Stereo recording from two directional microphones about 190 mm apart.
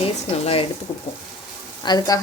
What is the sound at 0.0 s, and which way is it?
Speech, 30° left (ahead or behind).